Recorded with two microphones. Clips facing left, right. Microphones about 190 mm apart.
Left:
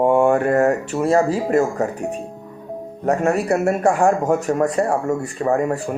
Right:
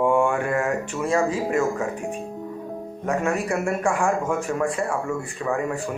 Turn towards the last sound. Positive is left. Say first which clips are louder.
# left 6 dB
turn(degrees=40)  # may be behind; listen again after turning